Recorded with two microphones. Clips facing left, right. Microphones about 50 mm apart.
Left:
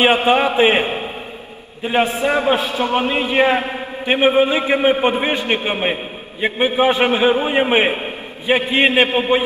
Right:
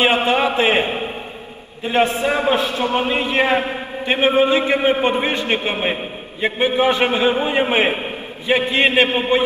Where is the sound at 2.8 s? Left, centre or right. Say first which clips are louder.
Left 1 dB; left.